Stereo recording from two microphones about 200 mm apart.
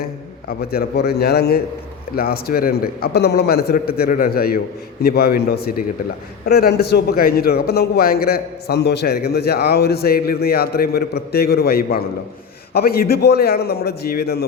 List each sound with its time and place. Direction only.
0.0 s a man's voice: 50° left (ahead or behind)